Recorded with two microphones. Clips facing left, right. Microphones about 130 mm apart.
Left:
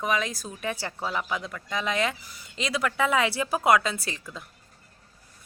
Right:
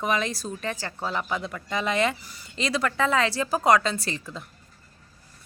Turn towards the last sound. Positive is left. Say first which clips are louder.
# right 3 dB
turn(degrees=0)  # may be behind; listen again after turning